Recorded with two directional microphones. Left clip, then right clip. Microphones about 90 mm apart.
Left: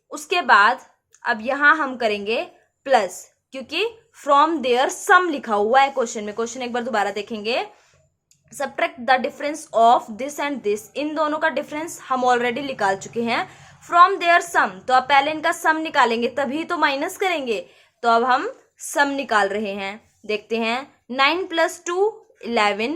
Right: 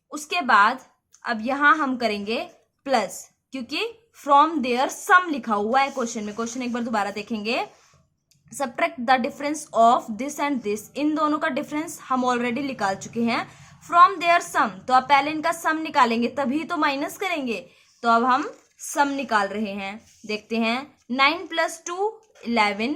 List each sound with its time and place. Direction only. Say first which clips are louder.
0.1 s a woman's voice: left 4 dB; 20° right (ahead or behind); by 12.0 s 40° right (ahead or behind)
12.0 s a woman's voice: left 5 dB; 25° right (ahead or behind)
18.8 s a woman's voice: left 2 dB; 20° right (ahead or behind)